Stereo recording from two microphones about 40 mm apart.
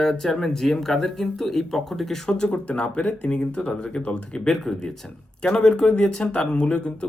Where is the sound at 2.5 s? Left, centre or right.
Left.